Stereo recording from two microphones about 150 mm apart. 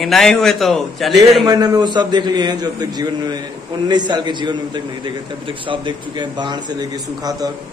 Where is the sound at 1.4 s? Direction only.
30° right (ahead or behind).